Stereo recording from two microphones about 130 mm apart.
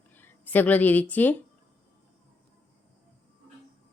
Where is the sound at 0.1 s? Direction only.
15° left (ahead or behind).